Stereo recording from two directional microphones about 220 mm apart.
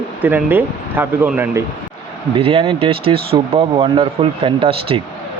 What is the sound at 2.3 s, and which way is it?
Speech, 25° right (ahead or behind).